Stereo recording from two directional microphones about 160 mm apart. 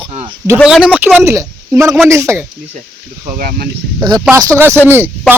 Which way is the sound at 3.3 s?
65° right (ahead or behind).